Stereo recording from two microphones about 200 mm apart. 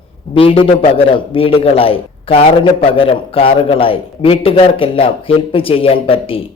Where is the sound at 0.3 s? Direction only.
30° left (ahead or behind).